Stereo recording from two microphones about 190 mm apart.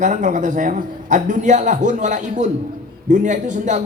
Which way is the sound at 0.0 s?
40° right (ahead or behind).